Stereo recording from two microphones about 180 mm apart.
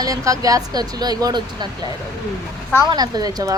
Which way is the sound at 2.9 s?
20° right (ahead or behind).